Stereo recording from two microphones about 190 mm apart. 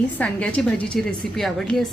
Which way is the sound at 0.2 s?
5° left (ahead or behind).